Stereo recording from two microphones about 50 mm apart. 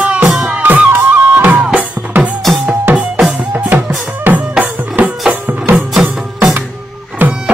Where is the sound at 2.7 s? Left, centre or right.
Right.